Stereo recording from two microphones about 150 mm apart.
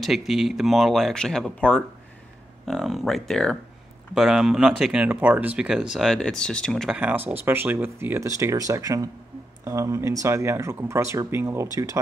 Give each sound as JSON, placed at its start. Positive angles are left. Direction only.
{"t": 0.0, "sound": "speech", "side_deg": 0}
{"t": 7.0, "sound": "speech", "side_deg": -10}